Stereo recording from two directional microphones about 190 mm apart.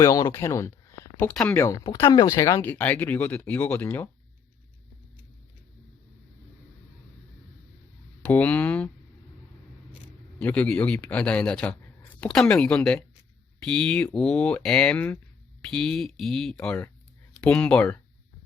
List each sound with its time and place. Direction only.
0.0 s speech: 20° left (ahead or behind)
8.2 s speech: 10° left (ahead or behind)
10.4 s speech: 5° left (ahead or behind)